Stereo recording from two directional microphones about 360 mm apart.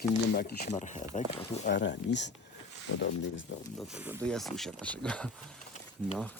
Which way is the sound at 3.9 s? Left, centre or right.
Centre.